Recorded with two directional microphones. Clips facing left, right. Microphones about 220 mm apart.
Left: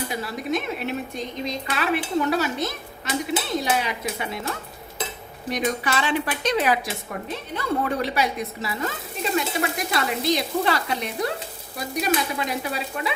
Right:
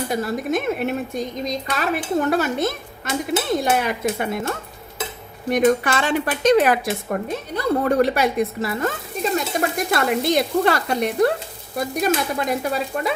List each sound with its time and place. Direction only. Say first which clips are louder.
0.1 s speech: right 5 dB; 45° right (ahead or behind)